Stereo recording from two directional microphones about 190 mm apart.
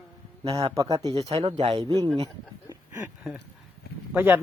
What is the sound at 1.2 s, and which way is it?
Speech, 30° right (ahead or behind).